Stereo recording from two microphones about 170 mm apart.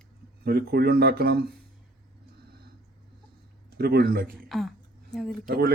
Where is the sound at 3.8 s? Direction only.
70° right (ahead or behind).